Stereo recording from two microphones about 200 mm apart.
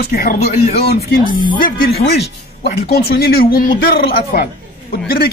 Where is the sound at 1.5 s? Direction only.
45° left (ahead or behind).